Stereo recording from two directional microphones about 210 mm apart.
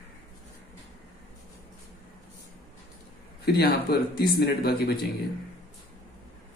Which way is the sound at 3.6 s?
45° left (ahead or behind).